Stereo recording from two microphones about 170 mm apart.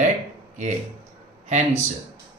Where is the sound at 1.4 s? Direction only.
40° right (ahead or behind).